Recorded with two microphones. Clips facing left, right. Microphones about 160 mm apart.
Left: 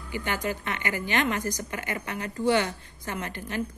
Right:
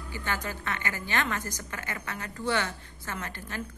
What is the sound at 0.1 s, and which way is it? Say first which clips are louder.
A woman's voice: left 5 dB; 15° left (ahead or behind).